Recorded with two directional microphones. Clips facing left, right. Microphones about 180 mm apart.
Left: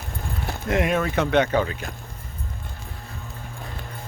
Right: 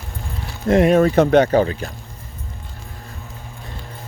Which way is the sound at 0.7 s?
35° right (ahead or behind).